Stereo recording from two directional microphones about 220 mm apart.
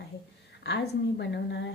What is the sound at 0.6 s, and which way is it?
A woman's voice, 50° left (ahead or behind).